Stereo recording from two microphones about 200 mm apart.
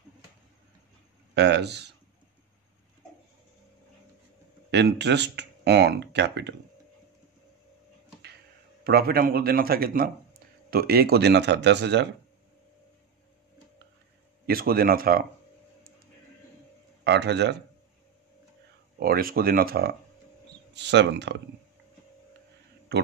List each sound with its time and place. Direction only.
1.3 s speech: 60° right (ahead or behind)
4.6 s speech: 60° right (ahead or behind)
8.8 s a man's voice: 50° right (ahead or behind)
14.4 s a man's voice: 50° right (ahead or behind)
17.0 s speech: 60° right (ahead or behind)
18.9 s a man's voice: 45° right (ahead or behind)